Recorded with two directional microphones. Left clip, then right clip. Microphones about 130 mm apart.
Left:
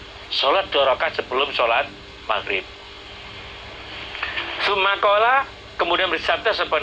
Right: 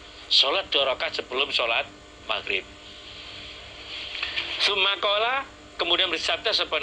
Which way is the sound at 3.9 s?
35° right (ahead or behind).